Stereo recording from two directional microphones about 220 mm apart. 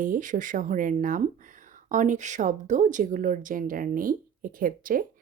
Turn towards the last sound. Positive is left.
turn(degrees=-40)  # may be behind; listen again after turning